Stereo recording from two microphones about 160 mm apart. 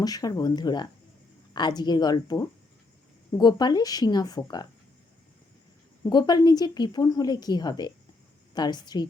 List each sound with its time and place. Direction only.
0.0 s a woman's voice: 25° left (ahead or behind)
6.1 s a woman's voice: 25° left (ahead or behind)